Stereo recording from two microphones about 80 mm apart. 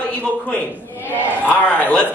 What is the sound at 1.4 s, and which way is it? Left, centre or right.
Speech, centre.